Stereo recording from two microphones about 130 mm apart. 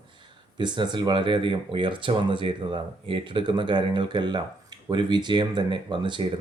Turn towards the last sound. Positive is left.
turn(degrees=-35)  # may be behind; listen again after turning